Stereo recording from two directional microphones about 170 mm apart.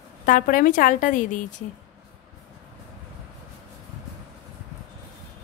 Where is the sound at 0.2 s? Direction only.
50° left (ahead or behind).